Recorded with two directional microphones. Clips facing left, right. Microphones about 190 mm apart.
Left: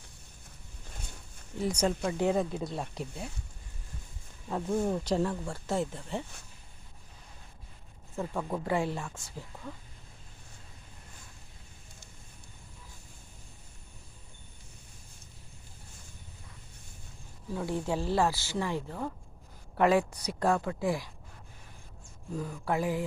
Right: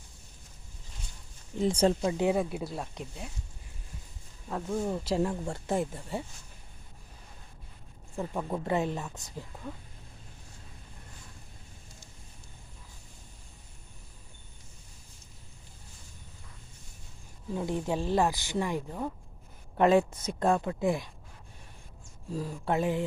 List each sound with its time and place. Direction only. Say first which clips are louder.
1.5 s speech: right 4 dB; 25° right (ahead or behind)
2.1 s speech: right 1 dB; 10° right (ahead or behind)
4.4 s speech: left 2 dB; 5° left (ahead or behind)
5.2 s speech: right 1 dB; 20° right (ahead or behind)
8.3 s speech: right 1 dB; 10° right (ahead or behind)
17.5 s speech: right 1 dB; 15° right (ahead or behind)
19.7 s speech: right 2 dB; 25° right (ahead or behind)
22.3 s speech: right 1 dB; 30° right (ahead or behind)